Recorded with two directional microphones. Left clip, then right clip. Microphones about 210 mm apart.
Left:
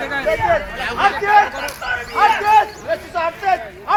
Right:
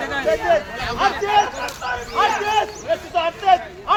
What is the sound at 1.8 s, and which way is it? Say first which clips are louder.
Speech: left 4 dB; 30° left (ahead or behind).